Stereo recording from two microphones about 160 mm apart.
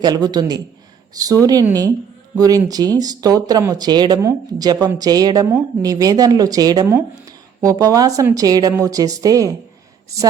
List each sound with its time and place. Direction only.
0.0 s speech: 25° right (ahead or behind)